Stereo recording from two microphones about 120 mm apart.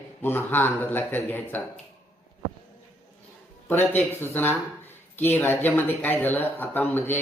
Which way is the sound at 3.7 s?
15° left (ahead or behind).